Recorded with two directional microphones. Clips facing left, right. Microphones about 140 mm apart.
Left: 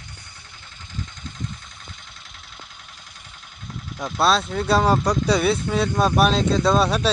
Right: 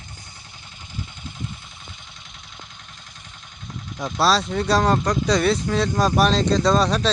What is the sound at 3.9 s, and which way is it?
Speech, centre (ahead or behind).